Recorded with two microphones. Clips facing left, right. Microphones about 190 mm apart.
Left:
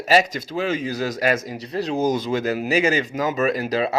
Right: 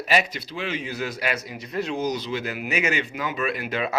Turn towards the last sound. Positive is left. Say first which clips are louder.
# left 5 dB
turn(degrees=35)  # may be behind; listen again after turning